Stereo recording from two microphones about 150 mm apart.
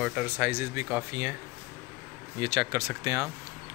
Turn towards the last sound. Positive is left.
turn(degrees=-25)  # may be behind; listen again after turning